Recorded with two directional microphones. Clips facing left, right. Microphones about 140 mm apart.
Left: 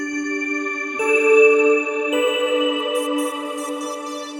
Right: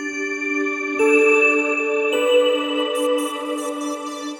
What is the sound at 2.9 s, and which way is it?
Music, centre (ahead or behind).